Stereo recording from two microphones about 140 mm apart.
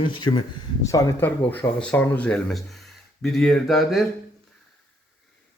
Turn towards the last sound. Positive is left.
turn(degrees=0)  # may be behind; listen again after turning